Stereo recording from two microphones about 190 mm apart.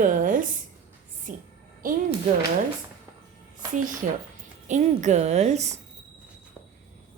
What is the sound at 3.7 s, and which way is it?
A woman's voice, 45° right (ahead or behind).